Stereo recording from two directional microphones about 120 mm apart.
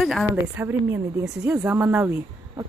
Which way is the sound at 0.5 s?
20° right (ahead or behind).